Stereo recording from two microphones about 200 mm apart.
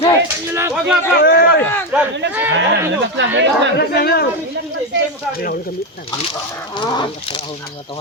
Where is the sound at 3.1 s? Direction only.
60° right (ahead or behind).